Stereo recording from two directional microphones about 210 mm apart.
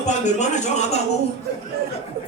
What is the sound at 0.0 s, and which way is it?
Speech, 35° left (ahead or behind).